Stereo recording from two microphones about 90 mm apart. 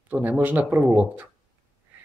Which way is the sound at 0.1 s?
15° right (ahead or behind).